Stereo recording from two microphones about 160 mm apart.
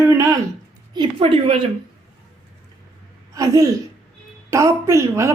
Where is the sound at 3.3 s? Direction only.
20° right (ahead or behind).